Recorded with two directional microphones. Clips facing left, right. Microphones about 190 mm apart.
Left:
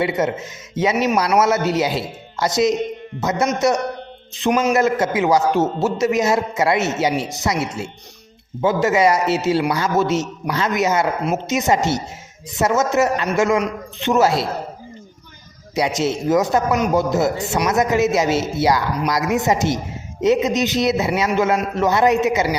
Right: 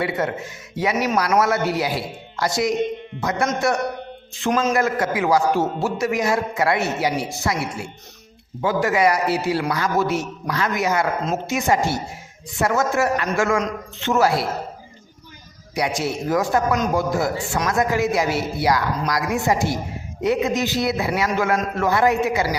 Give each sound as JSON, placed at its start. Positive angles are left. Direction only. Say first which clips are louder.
{"t": 0.0, "sound": "a man's voice", "louder": "left 3 dB", "side_deg": 20}
{"t": 15.7, "sound": "a man's voice", "louder": "left 4 dB", "side_deg": 20}